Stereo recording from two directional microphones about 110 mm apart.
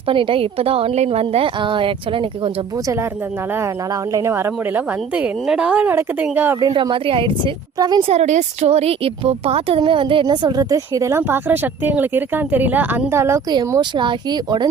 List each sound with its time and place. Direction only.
0.1 s a woman's voice: 55° right (ahead or behind)
4.1 s speech: 25° right (ahead or behind)
5.1 s speech: 10° right (ahead or behind)
6.9 s speech: 50° right (ahead or behind)
7.8 s speech: 40° right (ahead or behind)
8.0 s a woman's voice: 80° right; by 10.2 s 50° right (ahead or behind)
10.2 s speech: 35° right (ahead or behind)
11.2 s speech: 15° right (ahead or behind)
13.5 s speech: 40° right (ahead or behind)